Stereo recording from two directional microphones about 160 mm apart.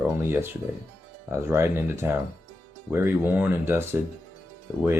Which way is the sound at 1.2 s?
15° right (ahead or behind).